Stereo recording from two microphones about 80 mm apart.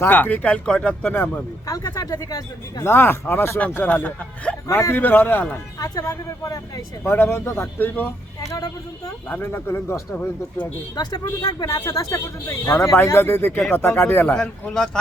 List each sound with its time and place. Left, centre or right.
0.0 s speech: left
1.6 s speech: left
2.8 s speech: left
4.7 s speech: left
4.9 s speech: left
5.8 s speech: left
7.0 s speech: left
8.4 s speech: left
9.3 s speech: left
10.9 s speech: left
14.3 s speech: centre